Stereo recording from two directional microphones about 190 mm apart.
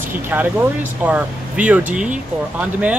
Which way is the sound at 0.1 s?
10° right (ahead or behind).